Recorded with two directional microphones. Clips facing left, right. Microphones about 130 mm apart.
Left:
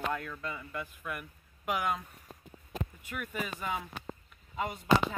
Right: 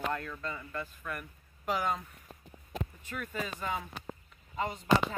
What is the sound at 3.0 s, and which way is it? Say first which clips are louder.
Speech: even; 10° left (ahead or behind).